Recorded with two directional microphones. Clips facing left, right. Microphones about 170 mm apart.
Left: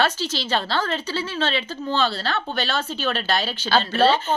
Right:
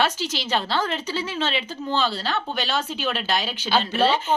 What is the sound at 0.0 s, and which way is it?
Speech, 15° right (ahead or behind).